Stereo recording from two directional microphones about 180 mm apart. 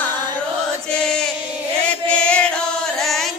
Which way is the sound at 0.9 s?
5° left (ahead or behind).